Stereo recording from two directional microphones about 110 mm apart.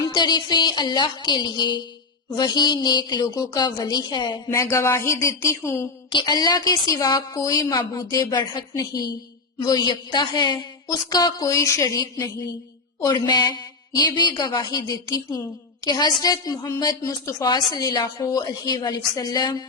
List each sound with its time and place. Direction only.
0.1 s a woman's voice: 40° left (ahead or behind)
4.5 s speech: 30° left (ahead or behind)
6.1 s a woman's voice: 45° left (ahead or behind)